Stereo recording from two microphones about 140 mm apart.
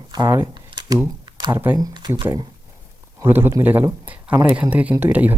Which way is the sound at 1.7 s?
30° right (ahead or behind).